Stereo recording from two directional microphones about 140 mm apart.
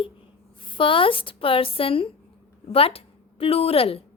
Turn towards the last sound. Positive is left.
turn(degrees=45)  # may be behind; listen again after turning